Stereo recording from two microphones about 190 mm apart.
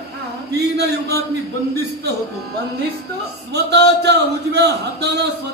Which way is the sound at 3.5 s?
60° right (ahead or behind).